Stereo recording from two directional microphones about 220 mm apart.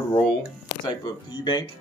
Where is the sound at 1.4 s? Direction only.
20° left (ahead or behind).